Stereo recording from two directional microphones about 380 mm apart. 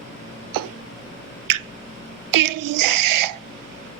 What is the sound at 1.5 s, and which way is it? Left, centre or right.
Finger snapping, right.